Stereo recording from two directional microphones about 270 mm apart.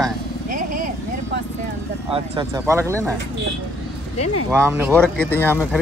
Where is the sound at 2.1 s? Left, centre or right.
Centre.